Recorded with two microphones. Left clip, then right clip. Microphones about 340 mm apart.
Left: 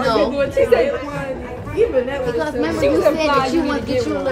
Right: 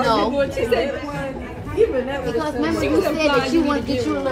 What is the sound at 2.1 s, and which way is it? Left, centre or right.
Speech, centre.